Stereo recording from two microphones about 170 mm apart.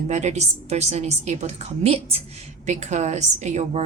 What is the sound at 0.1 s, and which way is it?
A woman's voice, 40° right (ahead or behind).